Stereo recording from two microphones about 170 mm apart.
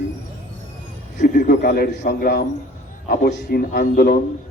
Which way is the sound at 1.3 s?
60° left (ahead or behind).